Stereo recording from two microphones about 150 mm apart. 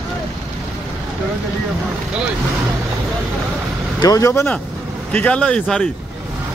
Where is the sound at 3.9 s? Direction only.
25° left (ahead or behind); by 5.9 s 5° left (ahead or behind).